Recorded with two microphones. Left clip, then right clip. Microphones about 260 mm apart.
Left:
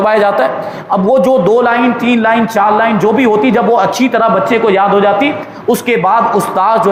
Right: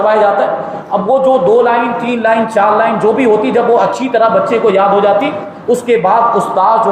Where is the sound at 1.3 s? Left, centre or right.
Left.